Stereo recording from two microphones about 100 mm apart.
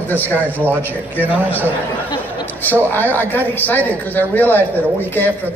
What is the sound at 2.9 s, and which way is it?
A woman's voice, 20° left (ahead or behind).